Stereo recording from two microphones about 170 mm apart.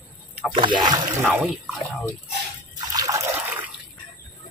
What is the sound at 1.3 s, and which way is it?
Water, 10° right (ahead or behind).